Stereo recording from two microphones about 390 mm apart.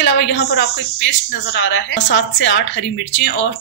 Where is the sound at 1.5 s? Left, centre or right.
Left.